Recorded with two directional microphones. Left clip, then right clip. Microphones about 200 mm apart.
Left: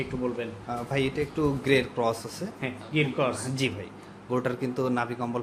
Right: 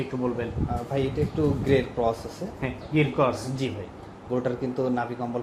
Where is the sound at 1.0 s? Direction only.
15° left (ahead or behind).